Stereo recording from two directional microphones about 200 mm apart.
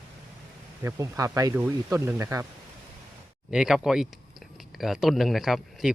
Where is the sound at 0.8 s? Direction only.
15° right (ahead or behind).